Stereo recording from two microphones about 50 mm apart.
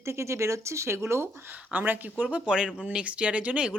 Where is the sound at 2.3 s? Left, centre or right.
Centre.